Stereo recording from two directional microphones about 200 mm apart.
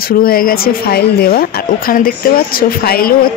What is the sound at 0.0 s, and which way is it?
Speech, 45° left (ahead or behind).